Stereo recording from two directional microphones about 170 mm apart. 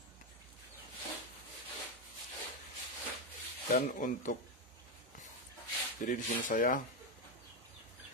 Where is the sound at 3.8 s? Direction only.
50° left (ahead or behind).